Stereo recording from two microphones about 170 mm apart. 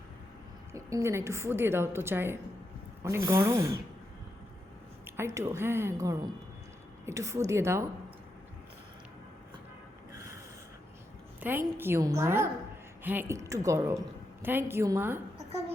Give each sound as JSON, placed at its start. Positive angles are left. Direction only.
{"t": 0.7, "sound": "a woman's voice", "side_deg": -20}
{"t": 5.0, "sound": "a woman's voice", "side_deg": -15}
{"t": 11.3, "sound": "a woman's voice", "side_deg": -10}